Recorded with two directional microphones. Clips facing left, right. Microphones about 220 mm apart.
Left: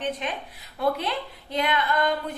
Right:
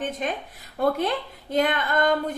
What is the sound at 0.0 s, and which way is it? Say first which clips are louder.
A woman's voice: right 1 dB; 45° right (ahead or behind).